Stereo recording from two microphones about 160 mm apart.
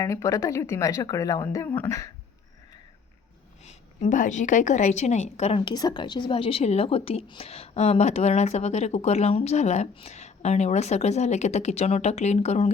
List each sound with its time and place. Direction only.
0.0 s speech: 20° left (ahead or behind)
3.7 s a woman's voice: 50° left (ahead or behind)
5.5 s a woman's voice: 30° left (ahead or behind); by 12.7 s 45° left (ahead or behind)